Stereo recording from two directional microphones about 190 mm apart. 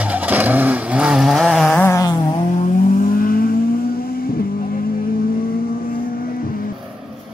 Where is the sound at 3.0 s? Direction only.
50° left (ahead or behind).